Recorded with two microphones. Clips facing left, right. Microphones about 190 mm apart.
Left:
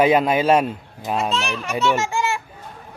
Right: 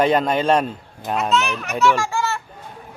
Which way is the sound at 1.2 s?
30° left (ahead or behind).